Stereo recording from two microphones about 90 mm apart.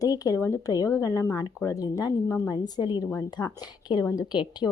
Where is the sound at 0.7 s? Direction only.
40° left (ahead or behind).